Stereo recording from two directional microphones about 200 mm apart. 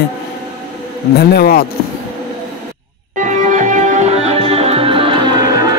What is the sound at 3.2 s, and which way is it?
Music, 40° right (ahead or behind).